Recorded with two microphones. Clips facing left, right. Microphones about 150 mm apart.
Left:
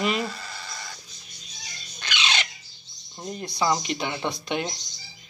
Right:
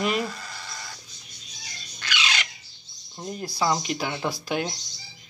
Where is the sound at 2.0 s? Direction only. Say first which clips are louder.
Left 1 dB; 25° left (ahead or behind).